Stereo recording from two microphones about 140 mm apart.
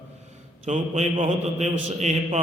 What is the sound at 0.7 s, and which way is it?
A man's voice, 55° right (ahead or behind).